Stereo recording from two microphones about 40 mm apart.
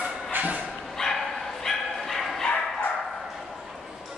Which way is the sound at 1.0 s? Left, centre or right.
Left.